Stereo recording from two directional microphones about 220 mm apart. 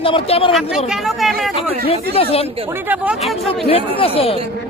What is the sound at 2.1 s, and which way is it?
Speech, 25° left (ahead or behind).